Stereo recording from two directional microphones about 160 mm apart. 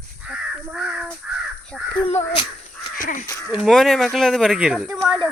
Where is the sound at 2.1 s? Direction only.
40° left (ahead or behind).